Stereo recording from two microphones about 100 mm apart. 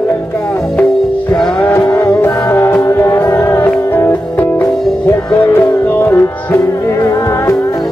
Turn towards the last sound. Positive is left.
turn(degrees=25)  # may be behind; listen again after turning